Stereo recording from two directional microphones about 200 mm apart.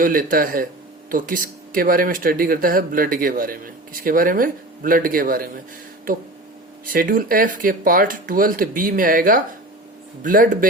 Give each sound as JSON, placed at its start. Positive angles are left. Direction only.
{"t": 0.0, "sound": "speech", "side_deg": -45}
{"t": 6.8, "sound": "speech", "side_deg": -45}